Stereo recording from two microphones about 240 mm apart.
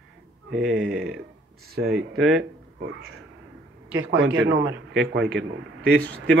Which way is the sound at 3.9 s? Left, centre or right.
Right.